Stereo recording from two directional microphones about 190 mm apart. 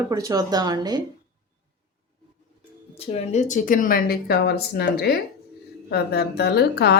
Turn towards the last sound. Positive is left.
turn(degrees=60)  # may be behind; listen again after turning